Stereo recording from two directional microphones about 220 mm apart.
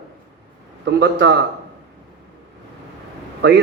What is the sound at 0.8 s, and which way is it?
Speech, 50° right (ahead or behind).